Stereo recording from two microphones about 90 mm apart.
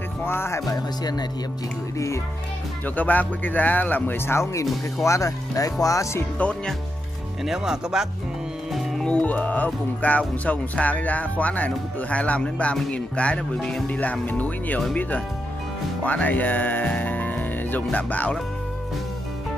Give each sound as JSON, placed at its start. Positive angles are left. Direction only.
{"t": 0.2, "sound": "speech", "side_deg": 25}
{"t": 2.8, "sound": "speech", "side_deg": 20}
{"t": 6.3, "sound": "speech", "side_deg": 15}
{"t": 7.4, "sound": "speech", "side_deg": -5}
{"t": 8.7, "sound": "speech", "side_deg": 5}